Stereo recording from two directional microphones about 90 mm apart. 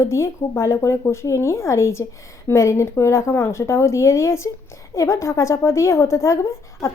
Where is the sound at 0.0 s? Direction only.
30° left (ahead or behind).